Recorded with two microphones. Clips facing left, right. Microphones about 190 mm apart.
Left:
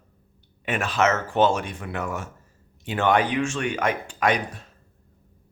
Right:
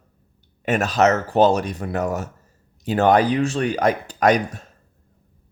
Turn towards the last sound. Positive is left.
turn(degrees=-40)  # may be behind; listen again after turning